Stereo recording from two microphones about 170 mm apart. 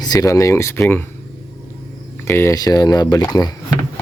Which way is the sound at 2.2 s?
15° left (ahead or behind).